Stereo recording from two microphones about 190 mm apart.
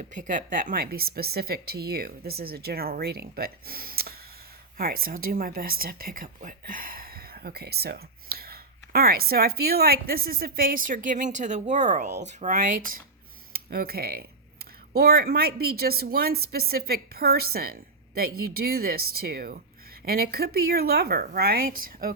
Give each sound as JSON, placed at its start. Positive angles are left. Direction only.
{"t": 0.0, "sound": "a woman's voice", "side_deg": -40}